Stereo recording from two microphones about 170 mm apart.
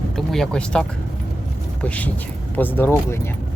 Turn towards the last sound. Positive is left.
turn(degrees=15)  # may be behind; listen again after turning